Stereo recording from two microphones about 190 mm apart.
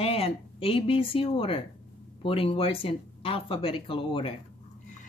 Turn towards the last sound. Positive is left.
turn(degrees=30)  # may be behind; listen again after turning